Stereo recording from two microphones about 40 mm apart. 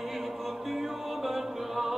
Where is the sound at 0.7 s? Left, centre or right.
Centre.